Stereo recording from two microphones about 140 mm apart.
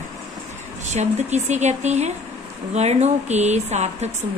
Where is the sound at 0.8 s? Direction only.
55° right (ahead or behind).